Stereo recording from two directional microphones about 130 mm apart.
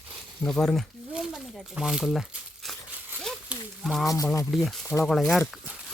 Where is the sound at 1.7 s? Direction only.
5° right (ahead or behind).